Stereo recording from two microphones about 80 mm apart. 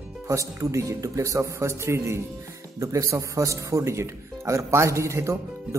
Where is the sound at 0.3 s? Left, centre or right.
Right.